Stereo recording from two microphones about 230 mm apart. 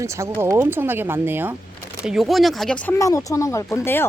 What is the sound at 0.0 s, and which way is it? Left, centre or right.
A woman's voice, centre.